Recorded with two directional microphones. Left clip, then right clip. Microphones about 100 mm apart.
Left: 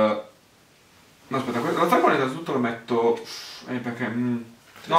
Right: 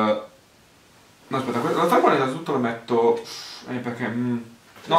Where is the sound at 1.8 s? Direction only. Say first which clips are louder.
Right 2 dB; 10° right (ahead or behind).